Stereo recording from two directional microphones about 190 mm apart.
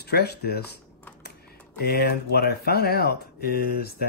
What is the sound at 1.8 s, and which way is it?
Speech, 55° left (ahead or behind).